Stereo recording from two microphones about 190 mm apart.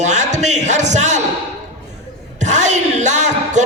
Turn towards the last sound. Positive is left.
turn(degrees=-40)  # may be behind; listen again after turning